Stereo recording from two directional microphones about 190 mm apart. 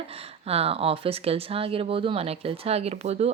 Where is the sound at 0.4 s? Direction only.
30° right (ahead or behind).